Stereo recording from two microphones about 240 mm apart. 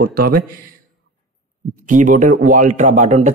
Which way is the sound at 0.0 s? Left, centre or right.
Right.